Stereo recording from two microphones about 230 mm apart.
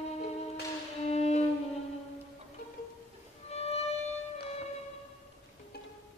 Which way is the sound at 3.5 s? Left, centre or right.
Left.